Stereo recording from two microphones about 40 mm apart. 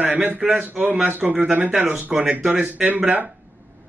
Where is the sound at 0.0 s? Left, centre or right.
Right.